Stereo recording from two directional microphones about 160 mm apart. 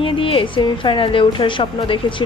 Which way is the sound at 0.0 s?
35° left (ahead or behind).